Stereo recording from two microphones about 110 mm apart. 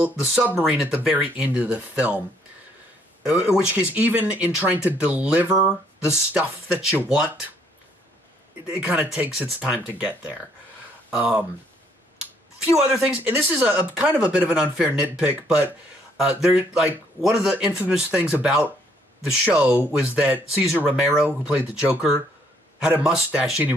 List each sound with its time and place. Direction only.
0.0 s speech: 15° right (ahead or behind)
3.3 s speech: 10° right (ahead or behind)
8.6 s speech: 10° right (ahead or behind)
13.0 s speech: 10° right (ahead or behind)
23.0 s speech: 5° right (ahead or behind)